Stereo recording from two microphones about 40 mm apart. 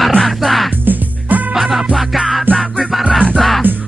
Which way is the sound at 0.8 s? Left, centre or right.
Right.